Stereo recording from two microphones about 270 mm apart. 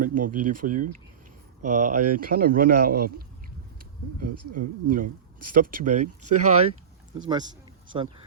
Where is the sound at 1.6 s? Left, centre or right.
Right.